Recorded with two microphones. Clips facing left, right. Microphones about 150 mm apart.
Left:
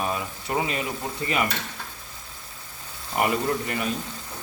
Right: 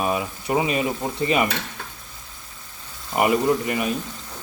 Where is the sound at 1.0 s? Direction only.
20° right (ahead or behind).